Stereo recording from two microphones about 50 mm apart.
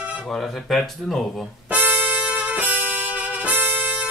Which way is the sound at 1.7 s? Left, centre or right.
Right.